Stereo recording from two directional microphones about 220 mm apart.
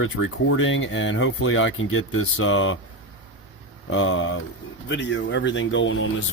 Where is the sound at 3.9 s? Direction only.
60° left (ahead or behind).